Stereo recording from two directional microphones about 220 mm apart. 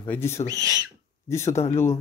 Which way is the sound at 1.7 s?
10° left (ahead or behind).